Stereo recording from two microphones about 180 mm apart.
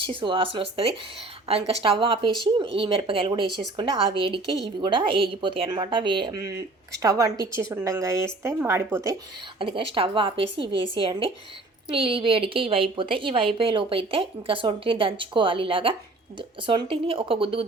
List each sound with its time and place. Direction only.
0.0 s a woman's voice: 30° right (ahead or behind)
9.6 s a woman's voice: 30° right (ahead or behind)